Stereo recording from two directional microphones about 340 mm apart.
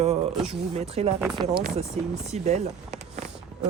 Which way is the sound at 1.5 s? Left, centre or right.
Centre.